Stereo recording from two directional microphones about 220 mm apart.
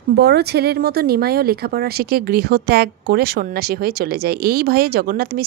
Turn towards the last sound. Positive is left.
turn(degrees=-45)  # may be behind; listen again after turning